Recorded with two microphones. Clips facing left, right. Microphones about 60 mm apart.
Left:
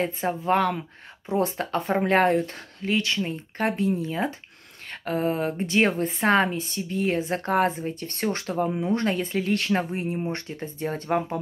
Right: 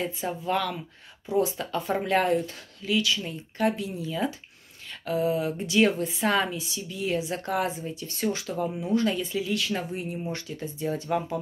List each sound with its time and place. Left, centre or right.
0.0 s a woman's voice: left